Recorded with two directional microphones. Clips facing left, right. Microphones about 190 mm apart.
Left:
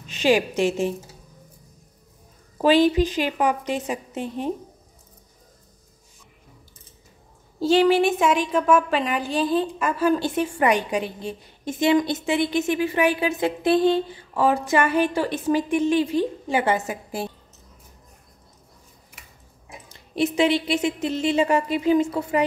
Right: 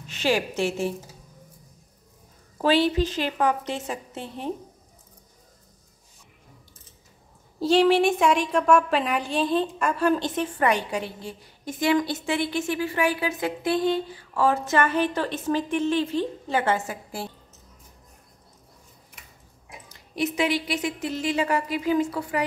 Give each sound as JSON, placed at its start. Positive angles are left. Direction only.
{"t": 0.0, "sound": "a woman's voice", "side_deg": 15}
{"t": 2.6, "sound": "a woman's voice", "side_deg": 15}
{"t": 7.6, "sound": "a woman's voice", "side_deg": 0}
{"t": 19.9, "sound": "a woman's voice", "side_deg": 25}